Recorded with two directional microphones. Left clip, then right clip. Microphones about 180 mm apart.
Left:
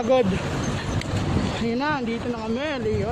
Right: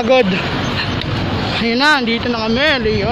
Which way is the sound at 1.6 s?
5° left (ahead or behind).